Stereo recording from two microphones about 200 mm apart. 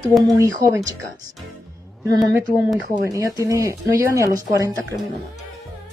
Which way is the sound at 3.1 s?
15° right (ahead or behind).